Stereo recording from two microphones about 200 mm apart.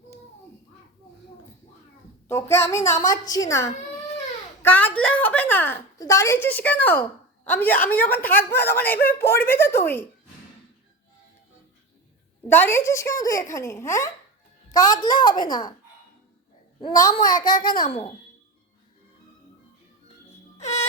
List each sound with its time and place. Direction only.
2.2 s a woman's voice: 10° left (ahead or behind)
12.5 s a woman's voice: 10° left (ahead or behind)
16.8 s a woman's voice: 20° left (ahead or behind)
20.6 s music: 35° left (ahead or behind)